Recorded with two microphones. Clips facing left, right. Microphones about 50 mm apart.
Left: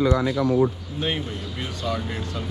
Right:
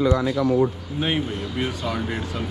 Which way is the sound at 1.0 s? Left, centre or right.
Centre.